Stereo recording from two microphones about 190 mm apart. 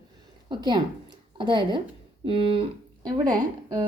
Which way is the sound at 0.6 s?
25° right (ahead or behind).